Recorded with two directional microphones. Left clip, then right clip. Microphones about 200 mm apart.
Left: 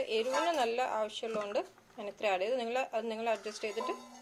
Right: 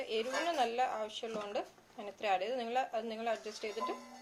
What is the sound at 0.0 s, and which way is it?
Speech, 20° left (ahead or behind).